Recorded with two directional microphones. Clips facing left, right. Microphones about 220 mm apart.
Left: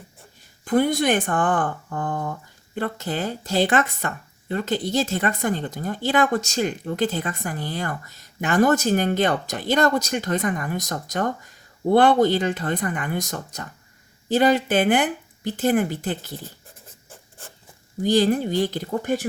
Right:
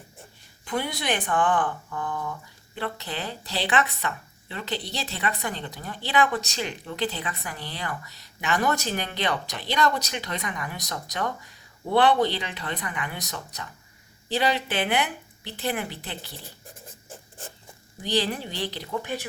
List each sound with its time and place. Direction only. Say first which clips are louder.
0.6 s speech: left 10 dB; 50° left (ahead or behind)
18.0 s speech: left 8 dB; 45° left (ahead or behind)